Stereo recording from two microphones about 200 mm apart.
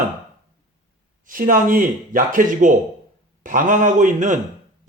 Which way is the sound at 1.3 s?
45° right (ahead or behind).